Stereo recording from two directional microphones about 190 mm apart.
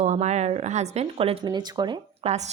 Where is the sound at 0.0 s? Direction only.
35° right (ahead or behind).